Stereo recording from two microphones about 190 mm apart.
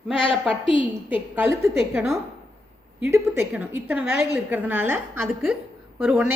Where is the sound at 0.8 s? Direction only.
10° right (ahead or behind).